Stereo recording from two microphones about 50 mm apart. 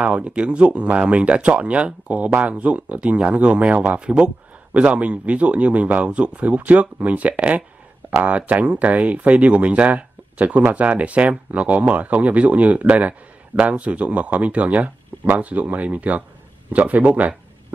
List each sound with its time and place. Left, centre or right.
0.0 s speech: right
4.0 s speech: centre